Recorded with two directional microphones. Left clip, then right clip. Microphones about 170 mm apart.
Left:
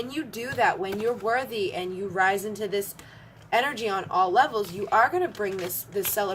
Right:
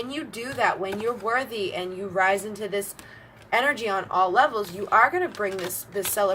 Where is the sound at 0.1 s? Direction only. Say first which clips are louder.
Even; 25° left (ahead or behind).